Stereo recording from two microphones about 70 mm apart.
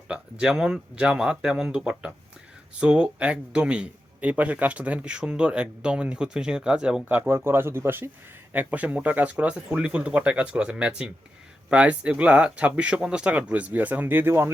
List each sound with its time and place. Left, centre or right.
0.1 s speech: centre
7.1 s speech: right
8.5 s speech: right